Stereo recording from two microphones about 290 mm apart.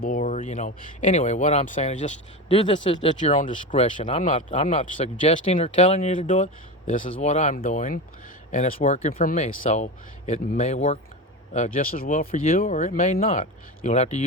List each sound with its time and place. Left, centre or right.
0.0 s speech: left